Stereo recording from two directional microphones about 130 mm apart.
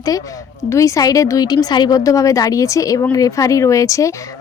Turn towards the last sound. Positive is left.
turn(degrees=25)  # may be behind; listen again after turning